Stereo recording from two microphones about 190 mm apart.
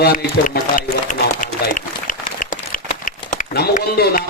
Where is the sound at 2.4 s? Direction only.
45° left (ahead or behind).